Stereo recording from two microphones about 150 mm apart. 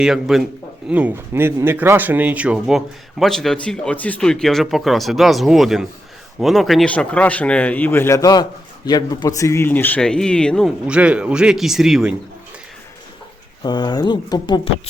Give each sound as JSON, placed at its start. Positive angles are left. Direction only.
{"t": 0.0, "sound": "a man's voice", "side_deg": 0}
{"t": 10.8, "sound": "speech", "side_deg": -5}
{"t": 13.6, "sound": "speech", "side_deg": 30}